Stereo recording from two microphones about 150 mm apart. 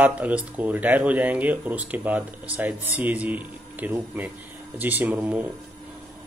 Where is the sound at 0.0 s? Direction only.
10° right (ahead or behind).